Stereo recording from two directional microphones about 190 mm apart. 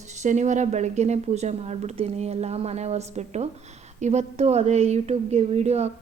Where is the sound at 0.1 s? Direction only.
40° right (ahead or behind).